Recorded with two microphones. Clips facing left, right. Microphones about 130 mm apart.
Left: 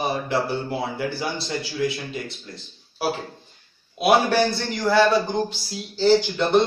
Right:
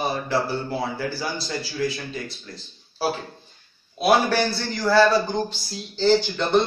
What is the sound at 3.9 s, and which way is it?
A man's voice, 20° left (ahead or behind).